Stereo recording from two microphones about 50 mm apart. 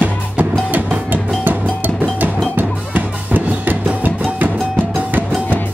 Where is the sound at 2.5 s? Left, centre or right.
Right.